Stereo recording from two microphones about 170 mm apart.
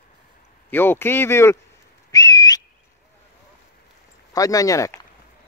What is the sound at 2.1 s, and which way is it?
Whistling, 20° left (ahead or behind).